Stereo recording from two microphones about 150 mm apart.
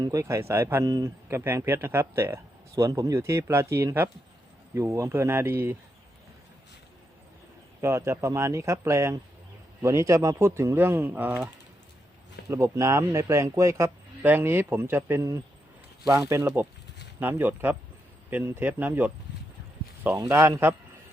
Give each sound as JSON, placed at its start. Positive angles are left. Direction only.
{"t": 0.0, "sound": "speech", "side_deg": -20}
{"t": 7.8, "sound": "speech", "side_deg": -20}
{"t": 12.5, "sound": "speech", "side_deg": -20}